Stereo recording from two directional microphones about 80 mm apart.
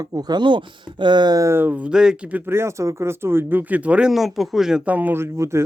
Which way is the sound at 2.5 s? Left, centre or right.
Right.